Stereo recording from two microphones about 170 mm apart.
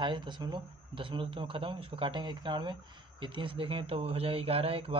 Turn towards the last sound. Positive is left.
turn(degrees=-35)  # may be behind; listen again after turning